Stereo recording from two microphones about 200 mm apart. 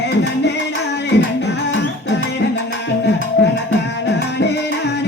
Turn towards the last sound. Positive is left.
turn(degrees=60)  # may be behind; listen again after turning